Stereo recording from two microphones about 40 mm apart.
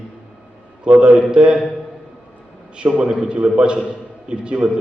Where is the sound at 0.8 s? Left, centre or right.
Right.